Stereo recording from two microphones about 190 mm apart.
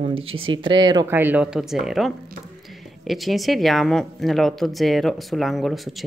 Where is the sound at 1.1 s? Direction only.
10° right (ahead or behind).